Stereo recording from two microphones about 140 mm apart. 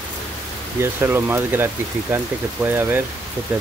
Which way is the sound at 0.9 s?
15° right (ahead or behind).